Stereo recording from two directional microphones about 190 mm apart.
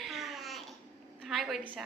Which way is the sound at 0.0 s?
Centre (ahead or behind).